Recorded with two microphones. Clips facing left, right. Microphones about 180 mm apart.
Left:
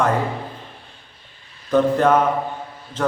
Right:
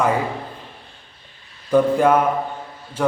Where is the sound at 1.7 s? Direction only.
10° right (ahead or behind).